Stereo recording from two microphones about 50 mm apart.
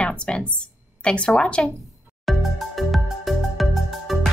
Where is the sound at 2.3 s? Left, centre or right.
Centre.